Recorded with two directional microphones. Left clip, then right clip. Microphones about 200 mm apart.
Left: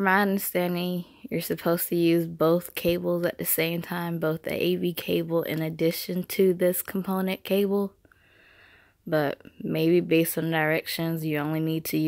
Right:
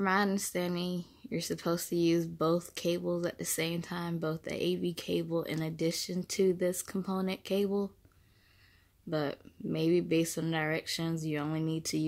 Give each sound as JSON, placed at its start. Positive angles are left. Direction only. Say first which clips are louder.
{"t": 0.0, "sound": "speech", "louder": "left 7 dB", "side_deg": 25}
{"t": 9.1, "sound": "speech", "louder": "left 9 dB", "side_deg": 30}